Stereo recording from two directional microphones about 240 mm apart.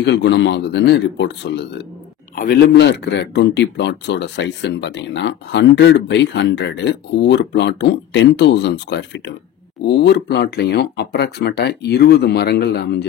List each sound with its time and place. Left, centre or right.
0.0 s speech: left